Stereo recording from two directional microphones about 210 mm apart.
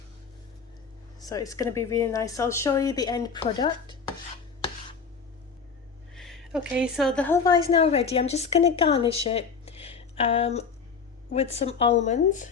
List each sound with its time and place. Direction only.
1.2 s speech: 15° left (ahead or behind)
6.1 s a woman's voice: centre (ahead or behind)
7.7 s speech: 25° left (ahead or behind)